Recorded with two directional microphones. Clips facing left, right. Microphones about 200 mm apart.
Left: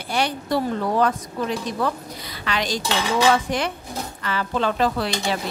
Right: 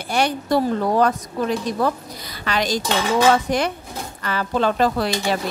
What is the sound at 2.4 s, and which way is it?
Speech, 40° right (ahead or behind).